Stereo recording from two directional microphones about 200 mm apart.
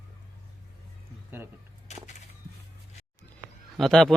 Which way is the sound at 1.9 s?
35° left (ahead or behind).